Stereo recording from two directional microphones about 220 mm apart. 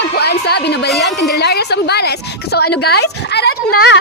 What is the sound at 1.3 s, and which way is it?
A woman's voice, 45° left (ahead or behind).